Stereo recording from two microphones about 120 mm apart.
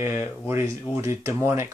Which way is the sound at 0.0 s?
25° right (ahead or behind).